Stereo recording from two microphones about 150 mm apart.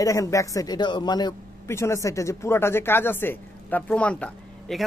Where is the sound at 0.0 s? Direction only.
20° left (ahead or behind).